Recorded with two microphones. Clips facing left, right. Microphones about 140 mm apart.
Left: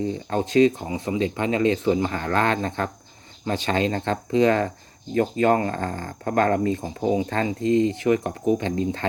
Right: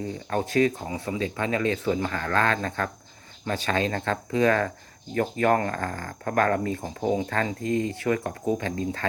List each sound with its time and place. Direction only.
0.3 s speech: 20° left (ahead or behind)